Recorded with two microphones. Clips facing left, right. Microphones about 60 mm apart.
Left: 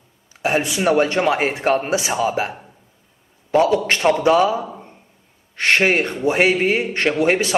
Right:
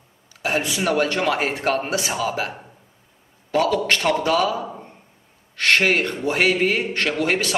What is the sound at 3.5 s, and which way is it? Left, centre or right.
A man's voice, left.